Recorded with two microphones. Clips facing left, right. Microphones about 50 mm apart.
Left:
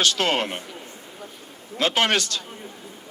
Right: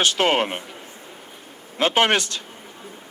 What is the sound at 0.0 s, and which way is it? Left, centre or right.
Speech, right.